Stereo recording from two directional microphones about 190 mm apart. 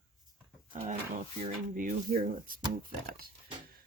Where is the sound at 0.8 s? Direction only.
40° right (ahead or behind).